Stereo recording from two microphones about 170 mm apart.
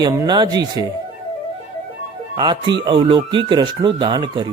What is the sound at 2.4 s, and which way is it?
A man's voice, 25° right (ahead or behind).